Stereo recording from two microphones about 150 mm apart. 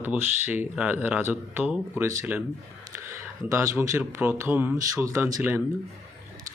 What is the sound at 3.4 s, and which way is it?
Speech, 20° right (ahead or behind).